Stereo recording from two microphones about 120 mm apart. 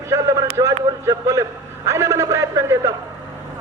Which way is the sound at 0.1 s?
25° right (ahead or behind).